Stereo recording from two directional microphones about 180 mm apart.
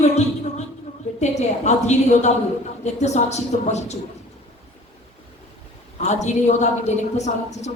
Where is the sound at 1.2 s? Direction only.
40° left (ahead or behind).